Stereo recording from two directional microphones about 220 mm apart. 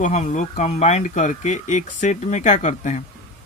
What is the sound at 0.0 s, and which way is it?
Speech, 35° left (ahead or behind).